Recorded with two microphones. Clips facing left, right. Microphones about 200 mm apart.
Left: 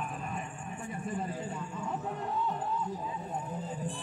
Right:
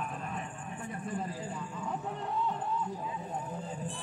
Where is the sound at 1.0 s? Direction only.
Centre (ahead or behind).